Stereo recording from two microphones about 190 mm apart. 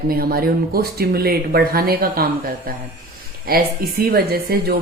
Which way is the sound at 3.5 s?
50° right (ahead or behind).